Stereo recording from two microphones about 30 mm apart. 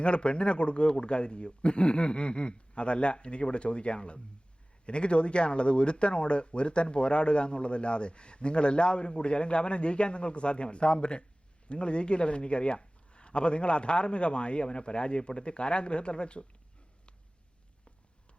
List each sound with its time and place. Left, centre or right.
0.0 s speech: left